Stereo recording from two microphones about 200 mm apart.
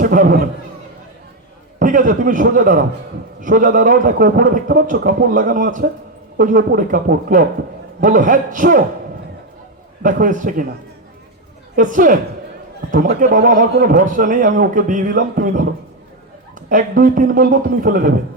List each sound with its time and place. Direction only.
0.0 s a man's voice: 45° right (ahead or behind)
1.8 s a man's voice: 40° right (ahead or behind)
10.0 s a man's voice: 40° right (ahead or behind)
11.8 s a man's voice: 40° right (ahead or behind)